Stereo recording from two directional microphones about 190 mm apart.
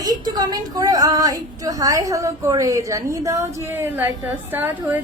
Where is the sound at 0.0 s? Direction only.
20° right (ahead or behind).